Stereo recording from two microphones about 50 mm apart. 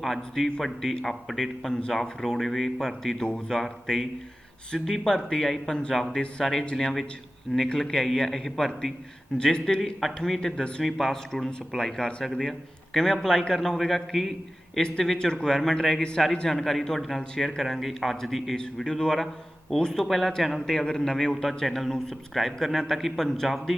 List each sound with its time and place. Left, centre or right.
0.6 s a man's voice: centre
10.8 s a man's voice: centre
11.1 s a man's voice: centre
14.8 s a man's voice: centre
18.5 s a man's voice: centre